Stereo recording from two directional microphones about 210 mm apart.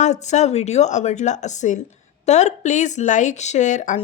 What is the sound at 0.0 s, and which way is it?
Speech, 35° left (ahead or behind).